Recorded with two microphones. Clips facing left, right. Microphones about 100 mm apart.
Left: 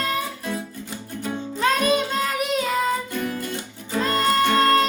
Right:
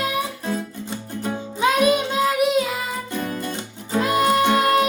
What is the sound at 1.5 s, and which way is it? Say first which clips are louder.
Music: right 3 dB; 10° right (ahead or behind).